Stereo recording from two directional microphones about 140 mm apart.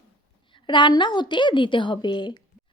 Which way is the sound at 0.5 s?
35° left (ahead or behind).